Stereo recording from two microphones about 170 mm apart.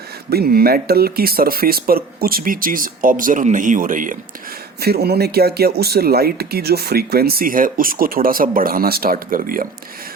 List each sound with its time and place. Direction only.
0.3 s speech: 65° right (ahead or behind)
4.8 s speech: 65° right (ahead or behind)